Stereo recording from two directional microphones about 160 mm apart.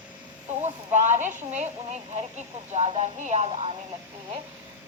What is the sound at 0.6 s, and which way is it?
Speech, 50° right (ahead or behind).